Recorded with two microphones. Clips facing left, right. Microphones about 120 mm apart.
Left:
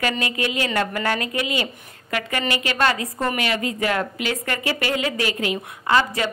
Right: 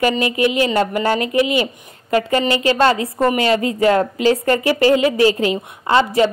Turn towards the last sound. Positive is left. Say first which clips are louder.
# right 5 dB
turn(degrees=-25)  # may be behind; listen again after turning